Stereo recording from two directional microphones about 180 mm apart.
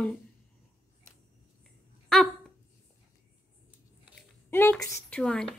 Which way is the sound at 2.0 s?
Centre (ahead or behind).